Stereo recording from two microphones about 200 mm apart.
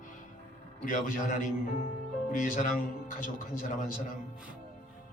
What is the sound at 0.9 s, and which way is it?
A man's voice, 40° left (ahead or behind).